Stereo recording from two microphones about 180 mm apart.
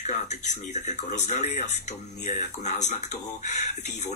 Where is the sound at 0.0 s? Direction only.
40° left (ahead or behind).